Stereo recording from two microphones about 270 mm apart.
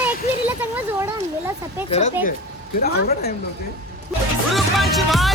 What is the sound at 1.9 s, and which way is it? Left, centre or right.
Speech, left.